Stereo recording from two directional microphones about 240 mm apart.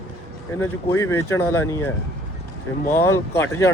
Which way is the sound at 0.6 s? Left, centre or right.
Centre.